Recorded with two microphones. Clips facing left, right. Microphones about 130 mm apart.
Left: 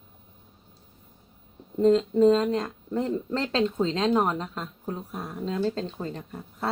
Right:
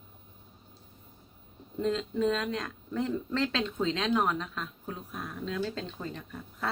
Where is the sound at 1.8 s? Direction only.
35° left (ahead or behind).